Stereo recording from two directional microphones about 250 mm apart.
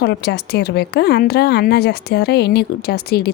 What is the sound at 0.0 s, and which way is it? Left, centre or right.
A woman's voice, left.